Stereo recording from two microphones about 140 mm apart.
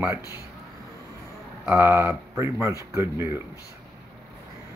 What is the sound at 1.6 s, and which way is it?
Speech, 15° right (ahead or behind).